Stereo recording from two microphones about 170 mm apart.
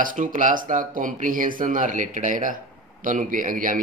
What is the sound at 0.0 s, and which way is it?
Speech, 50° right (ahead or behind).